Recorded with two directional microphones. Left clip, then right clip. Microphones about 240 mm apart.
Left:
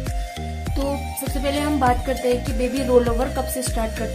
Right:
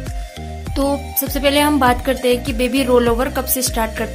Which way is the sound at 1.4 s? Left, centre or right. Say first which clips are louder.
Right 7 dB; centre.